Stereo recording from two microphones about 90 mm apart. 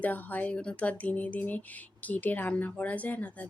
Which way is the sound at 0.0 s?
20° left (ahead or behind).